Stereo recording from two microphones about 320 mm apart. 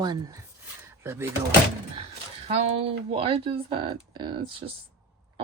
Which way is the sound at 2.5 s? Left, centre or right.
Centre.